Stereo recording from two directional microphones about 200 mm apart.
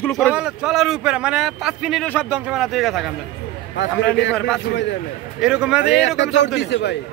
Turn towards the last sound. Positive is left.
turn(degrees=60)  # may be behind; listen again after turning